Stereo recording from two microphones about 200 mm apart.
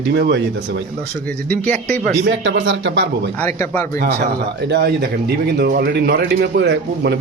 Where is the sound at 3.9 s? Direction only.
50° right (ahead or behind).